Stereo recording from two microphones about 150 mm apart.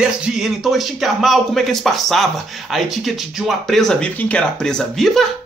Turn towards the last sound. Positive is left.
turn(degrees=0)  # may be behind; listen again after turning